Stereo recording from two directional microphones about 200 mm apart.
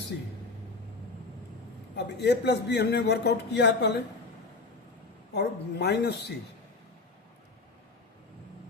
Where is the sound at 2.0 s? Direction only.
60° left (ahead or behind).